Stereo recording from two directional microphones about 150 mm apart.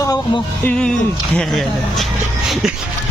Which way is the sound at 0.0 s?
25° left (ahead or behind).